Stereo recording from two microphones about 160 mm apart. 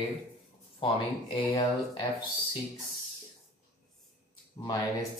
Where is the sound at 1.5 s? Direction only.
20° left (ahead or behind).